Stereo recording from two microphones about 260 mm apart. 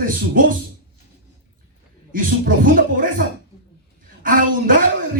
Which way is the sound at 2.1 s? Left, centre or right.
Right.